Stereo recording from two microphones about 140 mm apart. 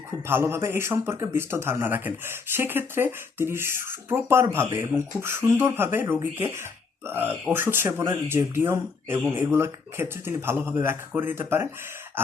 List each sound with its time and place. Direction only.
0.3 s a man's voice: 15° right (ahead or behind)